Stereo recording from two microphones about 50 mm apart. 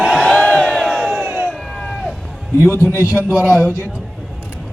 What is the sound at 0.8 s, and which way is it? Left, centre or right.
Crowd, centre.